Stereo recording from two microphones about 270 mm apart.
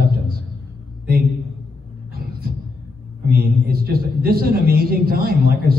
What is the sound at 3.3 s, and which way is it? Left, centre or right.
A man's voice, right.